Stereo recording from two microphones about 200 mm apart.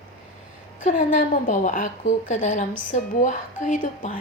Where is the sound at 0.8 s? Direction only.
40° left (ahead or behind).